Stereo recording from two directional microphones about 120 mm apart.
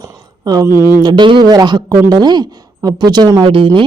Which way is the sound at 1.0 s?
40° right (ahead or behind).